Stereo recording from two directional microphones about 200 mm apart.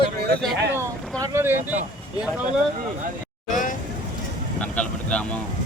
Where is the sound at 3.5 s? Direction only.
40° left (ahead or behind).